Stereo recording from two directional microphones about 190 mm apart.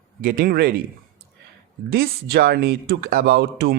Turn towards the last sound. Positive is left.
turn(degrees=-55)  # may be behind; listen again after turning